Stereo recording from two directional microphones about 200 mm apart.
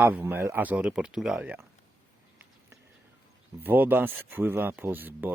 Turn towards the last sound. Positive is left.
turn(degrees=-10)  # may be behind; listen again after turning